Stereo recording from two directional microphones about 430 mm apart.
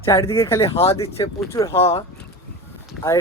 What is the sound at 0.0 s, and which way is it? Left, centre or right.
Speech, centre.